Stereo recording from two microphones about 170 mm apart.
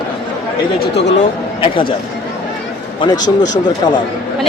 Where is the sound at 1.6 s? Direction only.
30° left (ahead or behind).